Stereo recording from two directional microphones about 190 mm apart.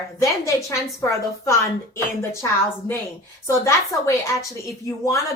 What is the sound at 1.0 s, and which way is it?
Speech, 15° left (ahead or behind).